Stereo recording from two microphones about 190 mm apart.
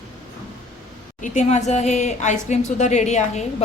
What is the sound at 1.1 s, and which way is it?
A woman's voice, 40° left (ahead or behind).